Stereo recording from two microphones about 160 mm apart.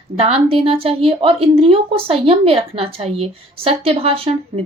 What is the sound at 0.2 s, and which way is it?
A woman's voice, 40° right (ahead or behind).